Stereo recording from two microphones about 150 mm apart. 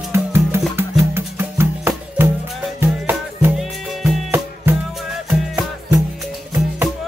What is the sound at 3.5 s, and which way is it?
Music, centre (ahead or behind).